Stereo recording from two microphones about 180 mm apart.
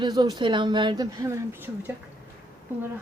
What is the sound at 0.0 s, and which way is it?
A woman's voice, 25° right (ahead or behind).